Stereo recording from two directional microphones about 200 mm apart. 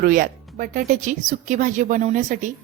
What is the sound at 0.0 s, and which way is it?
A woman's voice, 45° right (ahead or behind).